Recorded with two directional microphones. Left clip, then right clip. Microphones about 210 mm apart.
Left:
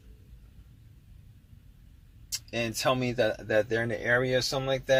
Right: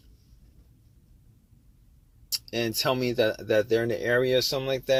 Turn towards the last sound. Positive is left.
turn(degrees=-40)  # may be behind; listen again after turning